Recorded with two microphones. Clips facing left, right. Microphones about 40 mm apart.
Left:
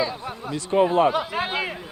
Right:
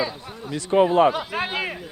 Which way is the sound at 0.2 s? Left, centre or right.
Left.